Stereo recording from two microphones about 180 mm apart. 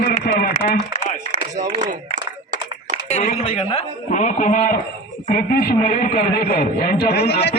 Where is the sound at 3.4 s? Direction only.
35° left (ahead or behind); by 5.7 s 55° left (ahead or behind).